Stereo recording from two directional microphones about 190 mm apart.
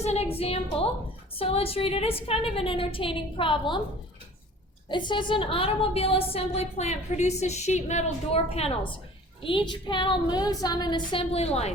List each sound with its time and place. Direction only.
0.0 s a sound: 35° left (ahead or behind)
1.4 s a woman's voice: 30° left (ahead or behind)
4.9 s a woman's voice: 25° left (ahead or behind)